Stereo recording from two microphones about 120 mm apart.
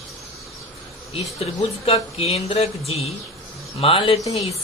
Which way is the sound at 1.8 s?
55° left (ahead or behind).